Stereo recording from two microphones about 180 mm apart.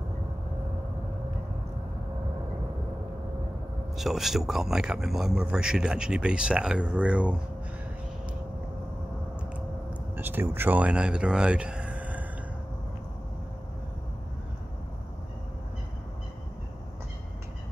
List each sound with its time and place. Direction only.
3.9 s speech: centre (ahead or behind)
10.1 s speech: 10° right (ahead or behind)